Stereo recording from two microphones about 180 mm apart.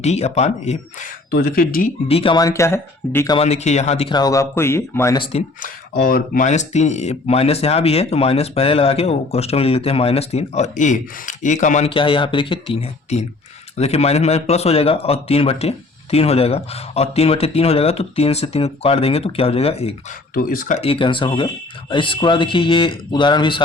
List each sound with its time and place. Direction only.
0.0 s speech: 40° left (ahead or behind)
1.3 s speech: 60° left (ahead or behind)
2.0 s speech: 30° left (ahead or behind); by 3.3 s 15° left (ahead or behind)
3.3 s speech: 35° left (ahead or behind)
4.1 s speech: 20° left (ahead or behind)
5.6 s speech: 55° left (ahead or behind)
11.9 s speech: 30° left (ahead or behind)
20.3 s speech: 50° left (ahead or behind)
20.8 s speech: 30° left (ahead or behind)